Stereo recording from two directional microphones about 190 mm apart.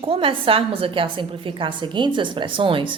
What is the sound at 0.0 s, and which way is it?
A woman's voice, 30° right (ahead or behind).